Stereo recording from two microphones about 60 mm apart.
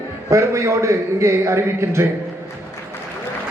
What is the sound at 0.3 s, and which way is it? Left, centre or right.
A man's voice, right.